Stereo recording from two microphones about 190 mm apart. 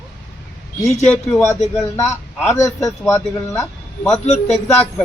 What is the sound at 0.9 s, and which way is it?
A man's voice, 10° left (ahead or behind).